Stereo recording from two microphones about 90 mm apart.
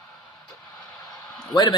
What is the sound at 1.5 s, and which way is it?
Speech, 55° left (ahead or behind).